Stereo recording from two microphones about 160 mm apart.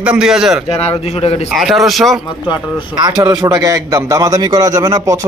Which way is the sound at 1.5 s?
Centre (ahead or behind).